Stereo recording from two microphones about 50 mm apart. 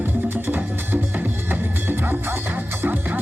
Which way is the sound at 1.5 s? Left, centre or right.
Right.